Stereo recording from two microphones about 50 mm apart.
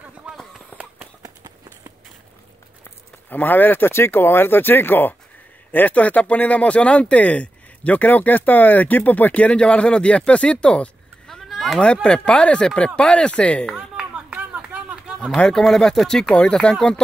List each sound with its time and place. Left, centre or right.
0.7 s run: left
3.3 s speech: left
11.2 s a sound: centre
11.8 s speech: left
13.7 s a sound: right
15.3 s speech: centre
16.3 s speech: centre